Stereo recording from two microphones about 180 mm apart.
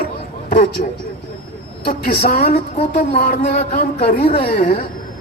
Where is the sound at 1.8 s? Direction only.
55° left (ahead or behind).